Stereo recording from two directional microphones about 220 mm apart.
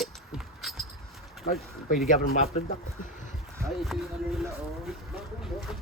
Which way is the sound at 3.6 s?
Centre (ahead or behind).